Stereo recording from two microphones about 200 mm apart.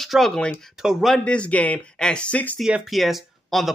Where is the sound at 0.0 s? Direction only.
Centre (ahead or behind).